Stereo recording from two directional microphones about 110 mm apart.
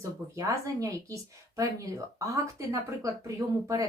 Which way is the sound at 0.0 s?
30° right (ahead or behind).